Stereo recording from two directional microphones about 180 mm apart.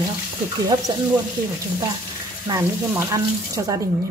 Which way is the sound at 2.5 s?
15° right (ahead or behind).